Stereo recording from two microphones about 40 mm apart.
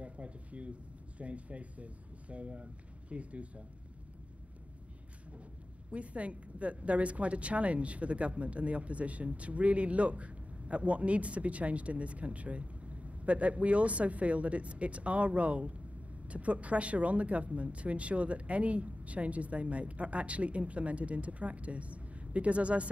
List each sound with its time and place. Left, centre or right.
0.0 s speech: right
5.9 s speech: right